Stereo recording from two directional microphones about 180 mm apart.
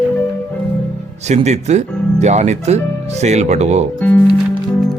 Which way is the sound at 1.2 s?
40° right (ahead or behind).